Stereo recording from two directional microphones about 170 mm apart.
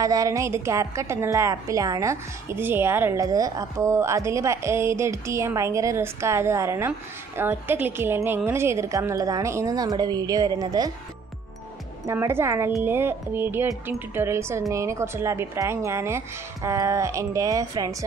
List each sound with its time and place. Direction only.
0.0 s a woman's voice: 20° right (ahead or behind)
12.1 s a woman's voice: 15° right (ahead or behind)